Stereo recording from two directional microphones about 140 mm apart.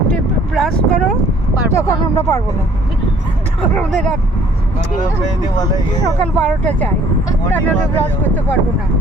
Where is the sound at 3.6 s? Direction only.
5° left (ahead or behind).